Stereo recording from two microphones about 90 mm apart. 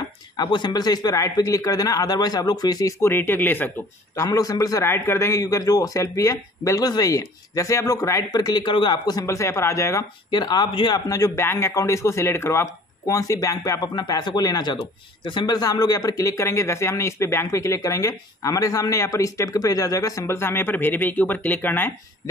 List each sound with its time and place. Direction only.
0.4 s a man's voice: 55° left (ahead or behind)
3.0 s speech: 25° left (ahead or behind)
4.1 s speech: 35° left (ahead or behind)
8.6 s speech: 60° left (ahead or behind)
9.2 s speech: 30° left (ahead or behind)
10.3 s a man's voice: 50° left (ahead or behind)
10.9 s speech: 40° left (ahead or behind)
13.7 s a man's voice: 55° left (ahead or behind)
14.8 s speech: 60° left (ahead or behind); by 21.9 s 25° left (ahead or behind)